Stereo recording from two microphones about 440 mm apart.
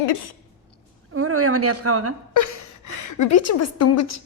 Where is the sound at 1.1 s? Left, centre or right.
Right.